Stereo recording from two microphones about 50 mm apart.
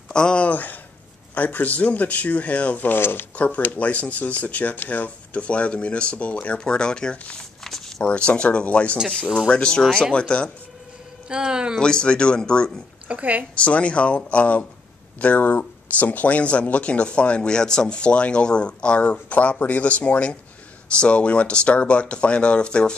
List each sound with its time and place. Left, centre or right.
0.1 s speech: centre
0.5 s speech: left
3.0 s speech: left
3.3 s speech: left
7.6 s a sound: centre
8.0 s speech: left
9.1 s speech: centre
11.2 s speech: centre
11.8 s speech: centre
13.1 s a woman's voice: right
13.6 s speech: left